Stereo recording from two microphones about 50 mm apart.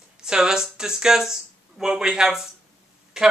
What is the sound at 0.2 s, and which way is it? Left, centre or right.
Speech, centre.